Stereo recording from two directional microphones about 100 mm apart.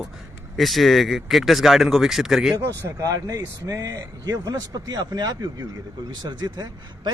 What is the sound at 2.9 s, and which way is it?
A man's voice, 35° right (ahead or behind).